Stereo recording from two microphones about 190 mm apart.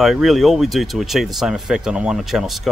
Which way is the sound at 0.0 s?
Centre (ahead or behind).